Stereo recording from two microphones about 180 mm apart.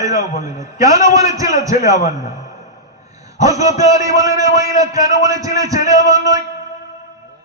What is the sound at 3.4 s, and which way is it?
A man's voice, 20° right (ahead or behind).